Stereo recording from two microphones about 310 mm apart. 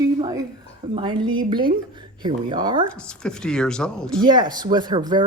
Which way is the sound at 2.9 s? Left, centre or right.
Centre.